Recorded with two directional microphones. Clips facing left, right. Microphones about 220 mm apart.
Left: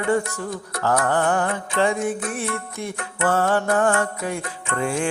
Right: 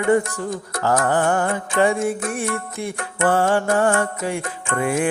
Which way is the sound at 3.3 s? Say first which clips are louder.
Right 1 dB; 15° right (ahead or behind).